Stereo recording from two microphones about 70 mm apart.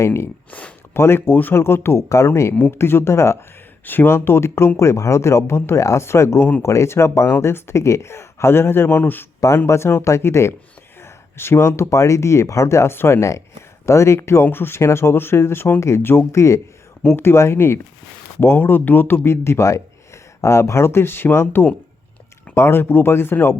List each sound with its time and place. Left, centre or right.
0.0 s speech: left
9.6 s speech: left